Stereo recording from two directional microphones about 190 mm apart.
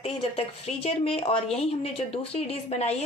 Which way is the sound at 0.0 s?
30° left (ahead or behind).